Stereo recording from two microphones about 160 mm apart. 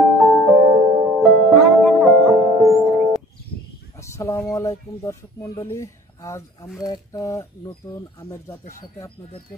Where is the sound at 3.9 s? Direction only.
20° left (ahead or behind).